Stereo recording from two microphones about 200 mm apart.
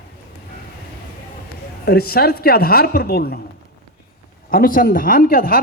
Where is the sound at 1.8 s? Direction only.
50° left (ahead or behind).